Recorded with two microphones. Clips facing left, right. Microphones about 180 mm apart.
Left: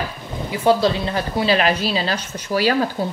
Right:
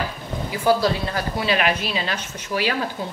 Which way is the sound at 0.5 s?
25° left (ahead or behind).